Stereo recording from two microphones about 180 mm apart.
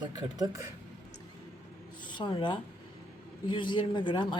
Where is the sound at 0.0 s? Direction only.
25° right (ahead or behind).